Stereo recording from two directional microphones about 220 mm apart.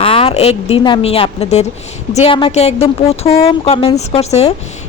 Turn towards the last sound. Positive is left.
turn(degrees=30)  # may be behind; listen again after turning